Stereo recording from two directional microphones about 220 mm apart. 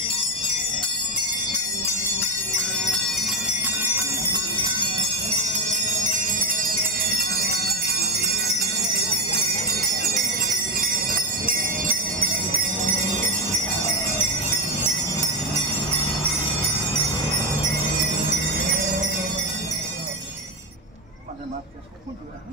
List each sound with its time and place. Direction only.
2.9 s bell: centre (ahead or behind); by 7.3 s 45° right (ahead or behind)
7.4 s jingle bell: 45° right (ahead or behind)
11.1 s jingle bell: 40° right (ahead or behind)